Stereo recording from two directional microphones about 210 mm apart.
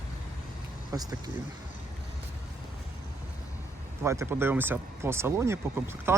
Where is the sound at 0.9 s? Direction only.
15° right (ahead or behind).